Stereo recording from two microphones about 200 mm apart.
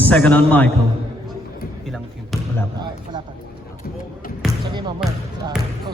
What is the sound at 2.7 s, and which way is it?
Speech, 20° right (ahead or behind).